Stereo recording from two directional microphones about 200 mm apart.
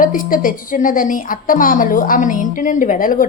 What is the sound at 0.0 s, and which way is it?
A woman's voice, 45° left (ahead or behind).